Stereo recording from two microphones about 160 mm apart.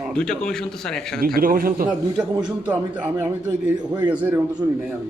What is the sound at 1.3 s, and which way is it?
Speech, 65° right (ahead or behind).